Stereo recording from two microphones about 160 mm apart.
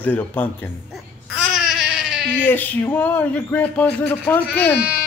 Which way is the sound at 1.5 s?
5° right (ahead or behind).